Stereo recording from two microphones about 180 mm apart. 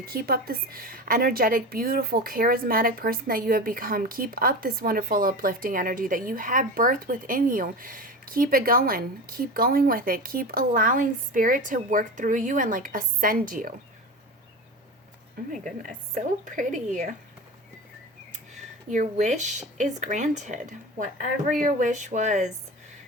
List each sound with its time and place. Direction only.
0.0 s a woman's voice: 55° right (ahead or behind)
16.1 s a woman's voice: 45° right (ahead or behind)
18.9 s a woman's voice: 40° right (ahead or behind)